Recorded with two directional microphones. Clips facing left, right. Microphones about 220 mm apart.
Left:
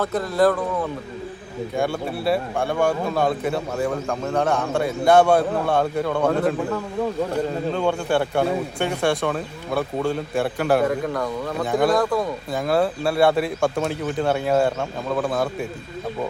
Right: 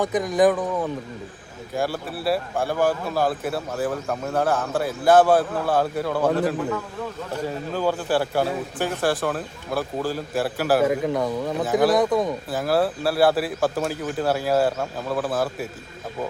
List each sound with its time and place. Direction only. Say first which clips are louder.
0.0 s speech: even; 15° right (ahead or behind)
1.7 s speech: left 2 dB; centre (ahead or behind)
10.8 s speech: right 1 dB; 20° right (ahead or behind)
11.6 s speech: even; 5° right (ahead or behind)
11.9 s speech: right 1 dB; 20° right (ahead or behind)
12.5 s speech: left 4 dB; 5° right (ahead or behind)